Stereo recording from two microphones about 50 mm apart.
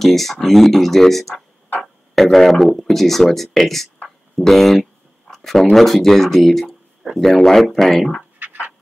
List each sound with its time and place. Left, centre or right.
0.0 s speech: centre
8.4 s dog: right